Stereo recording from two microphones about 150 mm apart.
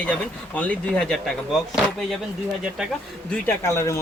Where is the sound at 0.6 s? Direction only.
10° left (ahead or behind).